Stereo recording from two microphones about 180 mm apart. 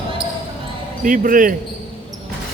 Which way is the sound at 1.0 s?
50° right (ahead or behind).